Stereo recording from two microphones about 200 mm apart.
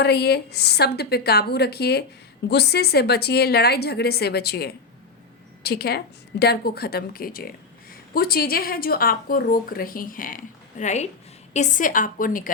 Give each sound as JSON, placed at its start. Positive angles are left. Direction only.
{"t": 0.0, "sound": "a woman's voice", "side_deg": 55}